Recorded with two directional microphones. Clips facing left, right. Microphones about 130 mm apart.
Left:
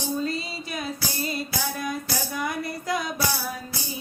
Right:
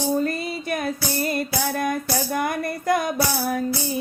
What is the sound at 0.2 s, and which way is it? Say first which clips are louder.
Music: right 4 dB; 55° right (ahead or behind).